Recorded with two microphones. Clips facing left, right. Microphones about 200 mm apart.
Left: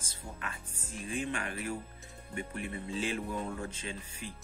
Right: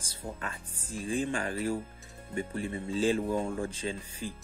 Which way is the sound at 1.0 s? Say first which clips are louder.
Right 5 dB; 30° right (ahead or behind).